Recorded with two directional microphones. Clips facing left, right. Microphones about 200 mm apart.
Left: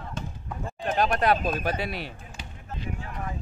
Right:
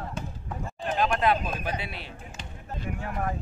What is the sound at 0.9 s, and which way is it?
Speech, 40° left (ahead or behind).